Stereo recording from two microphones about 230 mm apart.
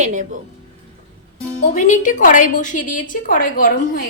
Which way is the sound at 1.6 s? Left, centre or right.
Left.